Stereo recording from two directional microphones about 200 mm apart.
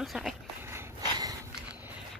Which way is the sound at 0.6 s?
15° right (ahead or behind).